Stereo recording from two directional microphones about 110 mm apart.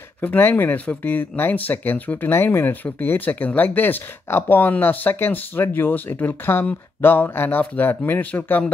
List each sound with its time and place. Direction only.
0.2 s speech: 20° left (ahead or behind)